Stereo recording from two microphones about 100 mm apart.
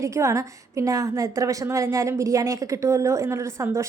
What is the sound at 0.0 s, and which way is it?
Speech, 30° right (ahead or behind).